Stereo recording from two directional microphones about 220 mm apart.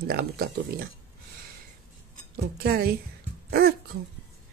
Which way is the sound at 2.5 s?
45° right (ahead or behind).